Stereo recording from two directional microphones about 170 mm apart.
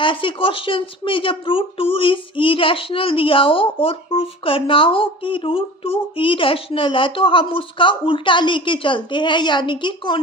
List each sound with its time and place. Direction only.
0.0 s speech: 30° left (ahead or behind)